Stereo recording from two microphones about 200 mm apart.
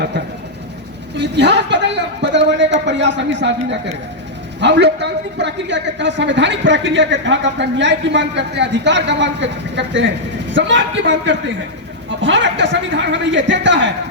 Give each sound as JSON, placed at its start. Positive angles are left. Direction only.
{"t": 1.1, "sound": "a man's voice", "side_deg": -60}